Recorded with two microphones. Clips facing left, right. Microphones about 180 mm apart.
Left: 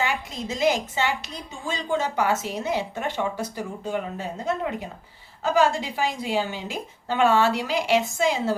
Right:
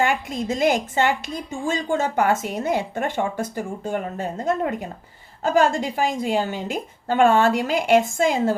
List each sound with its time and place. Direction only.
0.0 s a woman's voice: 50° right (ahead or behind)